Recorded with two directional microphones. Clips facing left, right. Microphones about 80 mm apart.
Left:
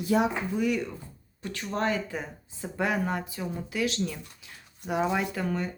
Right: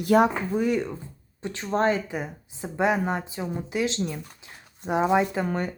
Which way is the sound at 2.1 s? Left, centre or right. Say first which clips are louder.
Right 4 dB; centre.